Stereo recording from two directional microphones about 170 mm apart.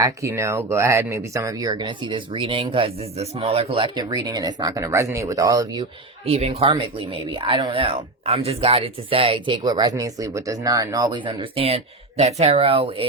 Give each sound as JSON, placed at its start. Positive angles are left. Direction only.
{"t": 0.0, "sound": "speech", "side_deg": -15}
{"t": 6.2, "sound": "speech", "side_deg": -35}